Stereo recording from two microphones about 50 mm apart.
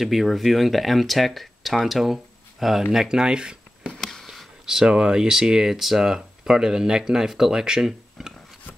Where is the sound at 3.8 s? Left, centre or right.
Centre.